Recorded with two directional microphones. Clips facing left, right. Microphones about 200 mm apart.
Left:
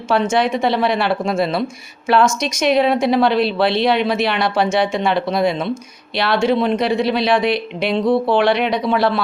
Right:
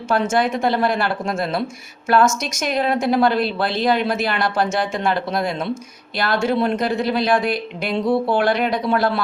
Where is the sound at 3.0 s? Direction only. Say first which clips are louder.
Left 2 dB; 50° right (ahead or behind).